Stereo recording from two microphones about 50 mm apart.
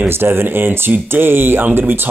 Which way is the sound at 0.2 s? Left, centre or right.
Right.